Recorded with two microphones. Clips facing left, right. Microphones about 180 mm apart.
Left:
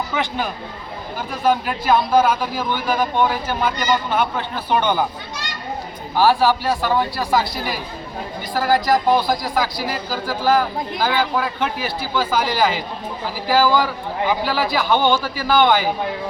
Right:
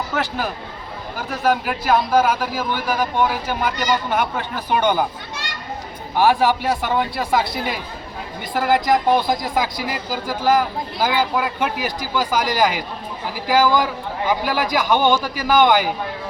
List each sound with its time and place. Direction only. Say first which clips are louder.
0.1 s speech: even; 5° right (ahead or behind)
1.5 s a man's voice: left 1 dB; 10° right (ahead or behind)
6.1 s a man's voice: left 1 dB; 20° right (ahead or behind)